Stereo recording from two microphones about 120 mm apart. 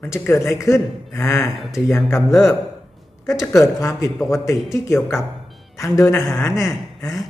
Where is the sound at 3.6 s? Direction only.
25° left (ahead or behind).